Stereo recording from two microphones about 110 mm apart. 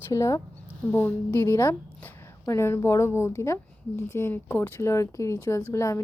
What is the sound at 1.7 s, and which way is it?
A woman's voice, 25° left (ahead or behind).